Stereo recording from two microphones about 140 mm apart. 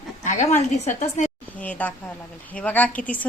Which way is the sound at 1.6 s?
10° left (ahead or behind).